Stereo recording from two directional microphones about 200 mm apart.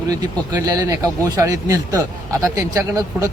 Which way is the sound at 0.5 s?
20° right (ahead or behind).